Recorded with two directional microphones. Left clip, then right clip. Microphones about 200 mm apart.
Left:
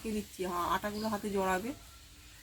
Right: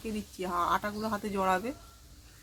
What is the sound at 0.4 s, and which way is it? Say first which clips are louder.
Speech: right 4 dB; 20° right (ahead or behind).